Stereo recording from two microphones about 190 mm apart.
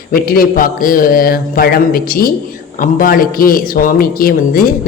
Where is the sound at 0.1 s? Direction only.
50° left (ahead or behind).